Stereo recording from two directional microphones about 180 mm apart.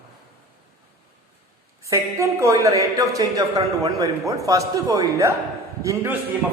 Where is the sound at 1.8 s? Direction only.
15° right (ahead or behind).